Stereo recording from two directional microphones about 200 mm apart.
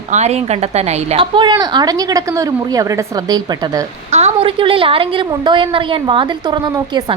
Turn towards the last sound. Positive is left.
turn(degrees=-20)  # may be behind; listen again after turning